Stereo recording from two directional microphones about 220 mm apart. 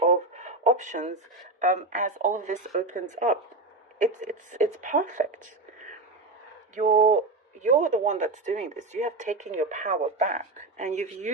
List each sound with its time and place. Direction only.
0.0 s a sound: 30° right (ahead or behind)
1.5 s speech: 35° right (ahead or behind)
6.7 s speech: 35° right (ahead or behind)